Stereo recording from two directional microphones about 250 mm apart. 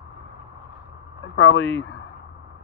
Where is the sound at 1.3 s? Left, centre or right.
Left.